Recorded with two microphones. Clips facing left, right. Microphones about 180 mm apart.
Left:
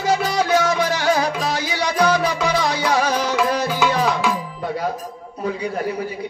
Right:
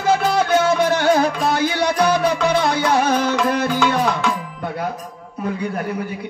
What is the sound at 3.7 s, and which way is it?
Music, 5° left (ahead or behind).